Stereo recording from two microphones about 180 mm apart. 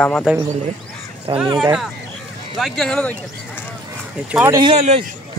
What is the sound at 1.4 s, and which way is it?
Speech, 25° right (ahead or behind).